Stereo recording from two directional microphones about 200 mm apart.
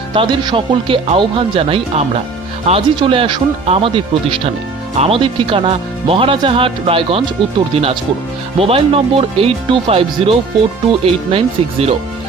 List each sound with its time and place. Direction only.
0.1 s speech: 25° right (ahead or behind)